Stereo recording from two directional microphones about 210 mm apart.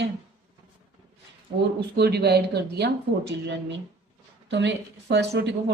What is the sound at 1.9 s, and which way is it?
A woman's voice, 50° right (ahead or behind).